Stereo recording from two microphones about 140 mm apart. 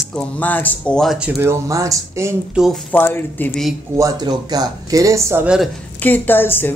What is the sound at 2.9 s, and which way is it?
Speech, 15° left (ahead or behind).